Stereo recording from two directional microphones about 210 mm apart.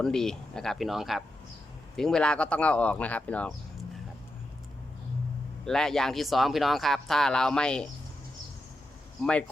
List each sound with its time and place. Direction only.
0.0 s speech: centre (ahead or behind)
5.6 s speech: centre (ahead or behind)